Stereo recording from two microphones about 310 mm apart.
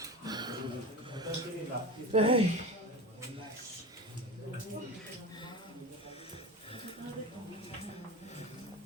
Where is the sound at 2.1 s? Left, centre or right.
Centre.